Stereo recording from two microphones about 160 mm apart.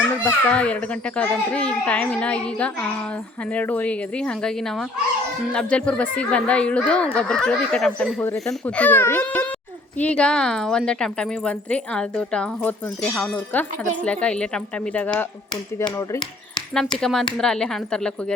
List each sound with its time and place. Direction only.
0.3 s a woman's voice: 10° left (ahead or behind)
16.0 s speech: 25° left (ahead or behind)
17.0 s speech: 5° left (ahead or behind)